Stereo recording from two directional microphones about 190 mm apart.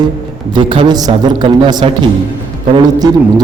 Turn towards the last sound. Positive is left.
turn(degrees=-20)  # may be behind; listen again after turning